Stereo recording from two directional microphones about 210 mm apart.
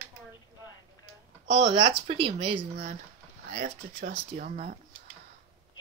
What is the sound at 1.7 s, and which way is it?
Speech, 25° right (ahead or behind).